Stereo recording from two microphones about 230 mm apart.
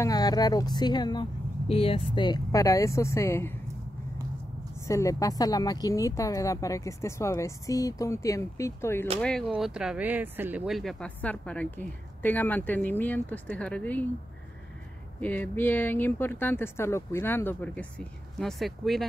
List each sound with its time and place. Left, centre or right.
0.0 s speech: centre
4.8 s speech: centre
9.6 s speech: centre
15.1 s speech: centre